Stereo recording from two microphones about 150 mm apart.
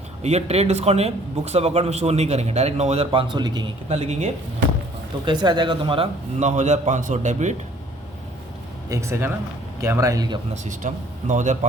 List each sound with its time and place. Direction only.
0.2 s speech: 45° right (ahead or behind); by 3.7 s 30° right (ahead or behind)
3.8 s speech: 45° right (ahead or behind)
5.2 s speech: 30° right (ahead or behind)
6.4 s speech: 50° right (ahead or behind)
8.9 s a man's voice: 20° right (ahead or behind)
10.5 s speech: 55° right (ahead or behind)